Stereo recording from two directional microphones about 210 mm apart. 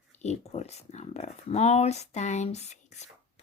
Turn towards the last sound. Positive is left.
turn(degrees=35)  # may be behind; listen again after turning